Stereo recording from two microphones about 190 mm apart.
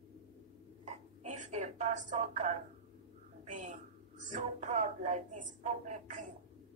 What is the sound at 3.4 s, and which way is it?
Speech, 40° right (ahead or behind).